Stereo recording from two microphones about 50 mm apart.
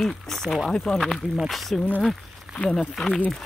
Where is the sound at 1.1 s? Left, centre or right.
Centre.